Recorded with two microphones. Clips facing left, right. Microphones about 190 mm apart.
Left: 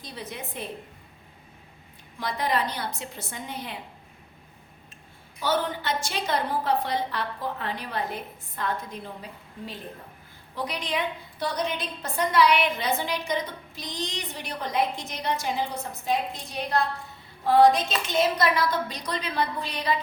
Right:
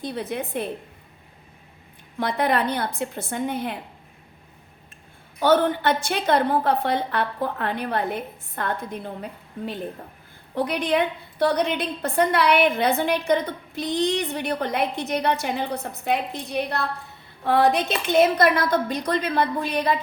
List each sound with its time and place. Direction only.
0.0 s a woman's voice: 60° right (ahead or behind)
2.1 s a woman's voice: 60° right (ahead or behind)
5.4 s a woman's voice: 60° right (ahead or behind)